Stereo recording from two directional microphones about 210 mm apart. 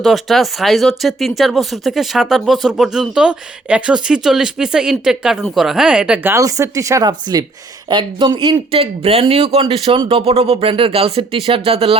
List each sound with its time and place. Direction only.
0.0 s speech: centre (ahead or behind); by 11.9 s 25° right (ahead or behind)